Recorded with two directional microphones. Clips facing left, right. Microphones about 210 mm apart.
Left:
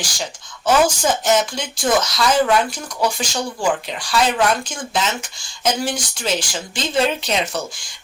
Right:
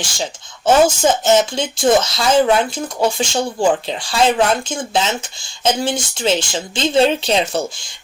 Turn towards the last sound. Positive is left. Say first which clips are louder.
# right 5 dB
turn(degrees=-25)  # may be behind; listen again after turning